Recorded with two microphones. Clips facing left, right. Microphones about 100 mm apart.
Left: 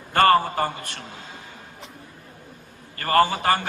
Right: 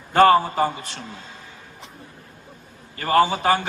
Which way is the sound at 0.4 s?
55° left (ahead or behind).